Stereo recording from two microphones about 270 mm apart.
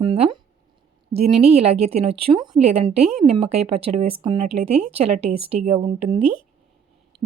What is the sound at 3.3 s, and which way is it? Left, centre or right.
Speech, right.